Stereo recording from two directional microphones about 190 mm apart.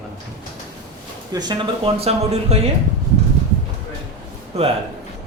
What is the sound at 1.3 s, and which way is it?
Speech, 20° right (ahead or behind).